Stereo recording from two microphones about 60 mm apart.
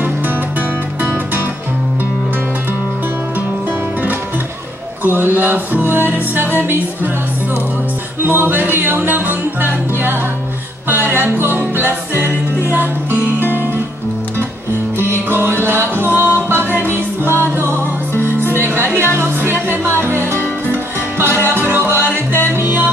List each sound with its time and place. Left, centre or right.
0.6 s music: right
5.0 s music: right
8.2 s music: right
15.0 s music: right